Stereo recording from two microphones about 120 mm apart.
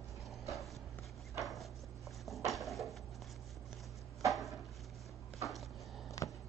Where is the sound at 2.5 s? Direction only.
Centre (ahead or behind).